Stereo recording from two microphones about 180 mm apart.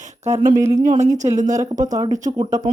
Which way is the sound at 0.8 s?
45° right (ahead or behind).